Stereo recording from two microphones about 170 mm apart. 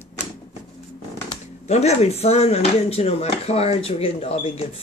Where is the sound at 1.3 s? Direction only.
40° left (ahead or behind).